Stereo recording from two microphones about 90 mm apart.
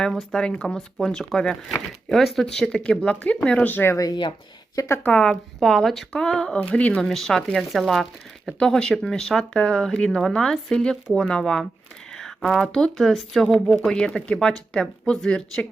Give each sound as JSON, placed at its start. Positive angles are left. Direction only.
{"t": 0.0, "sound": "speech", "side_deg": 5}
{"t": 3.9, "sound": "a woman's voice", "side_deg": 40}
{"t": 5.0, "sound": "speech", "side_deg": 10}
{"t": 7.0, "sound": "speech", "side_deg": 5}
{"t": 12.1, "sound": "a sound", "side_deg": 5}
{"t": 12.7, "sound": "speech", "side_deg": 5}